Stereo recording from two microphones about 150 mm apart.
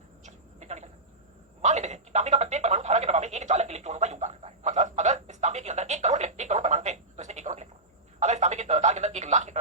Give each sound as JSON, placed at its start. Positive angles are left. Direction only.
{"t": 0.3, "sound": "a sound", "side_deg": -50}
{"t": 1.6, "sound": "telephone", "side_deg": -50}
{"t": 8.2, "sound": "speech", "side_deg": -50}